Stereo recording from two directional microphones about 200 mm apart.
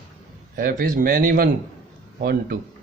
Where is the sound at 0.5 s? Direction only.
45° right (ahead or behind).